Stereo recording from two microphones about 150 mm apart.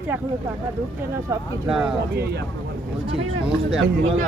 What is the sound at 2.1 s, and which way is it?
Speech, 90° right.